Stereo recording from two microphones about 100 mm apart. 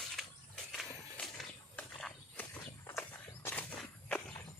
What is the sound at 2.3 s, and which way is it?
Walk, 15° left (ahead or behind).